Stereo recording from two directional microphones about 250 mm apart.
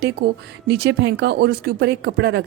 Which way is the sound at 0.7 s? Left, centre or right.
Right.